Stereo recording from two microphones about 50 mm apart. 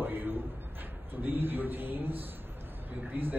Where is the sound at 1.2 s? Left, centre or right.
Right.